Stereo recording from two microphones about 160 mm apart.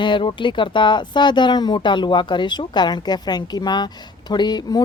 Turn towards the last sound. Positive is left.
turn(degrees=25)  # may be behind; listen again after turning